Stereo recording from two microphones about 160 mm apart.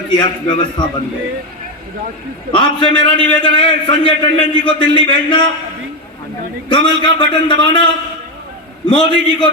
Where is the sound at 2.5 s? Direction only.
30° left (ahead or behind).